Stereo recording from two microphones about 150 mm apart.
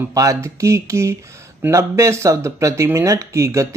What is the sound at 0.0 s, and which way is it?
Speech, 20° right (ahead or behind).